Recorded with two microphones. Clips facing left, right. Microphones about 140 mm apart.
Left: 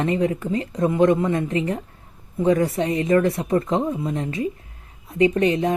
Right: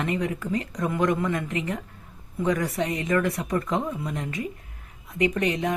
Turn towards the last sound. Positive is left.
turn(degrees=30)  # may be behind; listen again after turning